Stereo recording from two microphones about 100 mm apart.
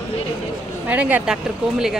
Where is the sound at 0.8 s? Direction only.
15° right (ahead or behind).